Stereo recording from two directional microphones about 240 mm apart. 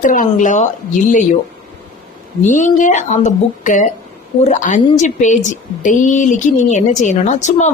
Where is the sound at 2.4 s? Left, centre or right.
Left.